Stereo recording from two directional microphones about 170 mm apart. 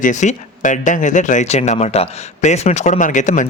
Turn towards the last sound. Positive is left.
turn(degrees=50)  # may be behind; listen again after turning